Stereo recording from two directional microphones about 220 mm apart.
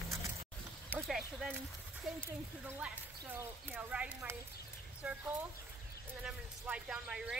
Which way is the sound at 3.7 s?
5° right (ahead or behind).